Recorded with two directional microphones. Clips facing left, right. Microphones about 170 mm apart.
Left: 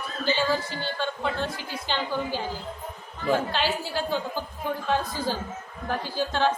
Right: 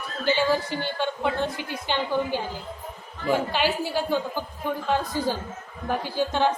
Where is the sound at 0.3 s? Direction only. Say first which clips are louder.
Right 3 dB; 15° right (ahead or behind).